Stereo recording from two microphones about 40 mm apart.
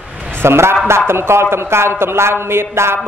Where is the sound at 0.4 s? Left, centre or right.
Right.